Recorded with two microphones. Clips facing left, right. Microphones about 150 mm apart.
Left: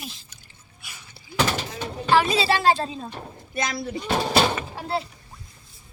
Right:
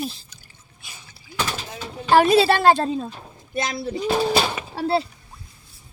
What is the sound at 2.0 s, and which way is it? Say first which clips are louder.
Speech: right 5 dB; 50° right (ahead or behind).